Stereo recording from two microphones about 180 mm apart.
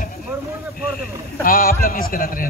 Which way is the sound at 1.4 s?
50° left (ahead or behind).